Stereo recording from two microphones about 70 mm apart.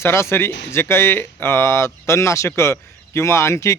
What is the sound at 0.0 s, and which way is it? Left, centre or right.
Speech, left.